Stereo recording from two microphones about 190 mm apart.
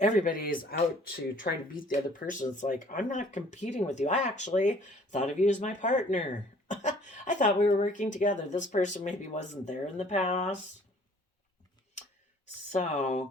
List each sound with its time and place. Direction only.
0.0 s speech: 40° left (ahead or behind)
12.7 s speech: 40° left (ahead or behind)